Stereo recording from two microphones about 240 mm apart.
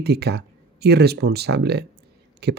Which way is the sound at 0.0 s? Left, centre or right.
Right.